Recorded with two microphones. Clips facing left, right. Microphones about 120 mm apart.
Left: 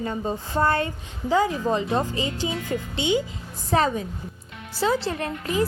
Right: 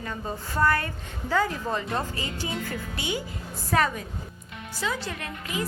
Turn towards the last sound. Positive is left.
turn(degrees=35)  # may be behind; listen again after turning